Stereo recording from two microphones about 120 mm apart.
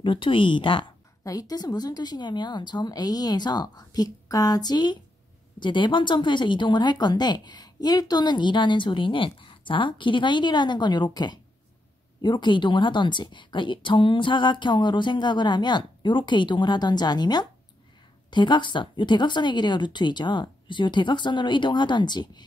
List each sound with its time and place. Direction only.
0.0 s speech: 45° left (ahead or behind)
1.2 s speech: 30° left (ahead or behind)